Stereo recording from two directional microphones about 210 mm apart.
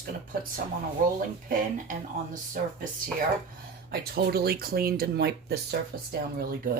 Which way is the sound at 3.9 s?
50° right (ahead or behind).